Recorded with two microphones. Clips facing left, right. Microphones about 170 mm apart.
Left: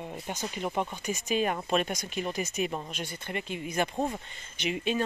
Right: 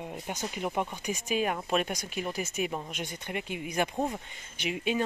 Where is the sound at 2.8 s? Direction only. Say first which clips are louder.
Even; 15° right (ahead or behind).